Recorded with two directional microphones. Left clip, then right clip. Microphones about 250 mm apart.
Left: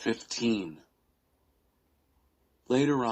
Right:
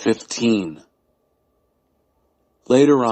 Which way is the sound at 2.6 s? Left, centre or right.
Right.